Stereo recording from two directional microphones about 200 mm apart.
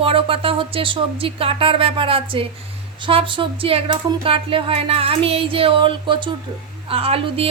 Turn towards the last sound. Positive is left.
turn(degrees=-30)  # may be behind; listen again after turning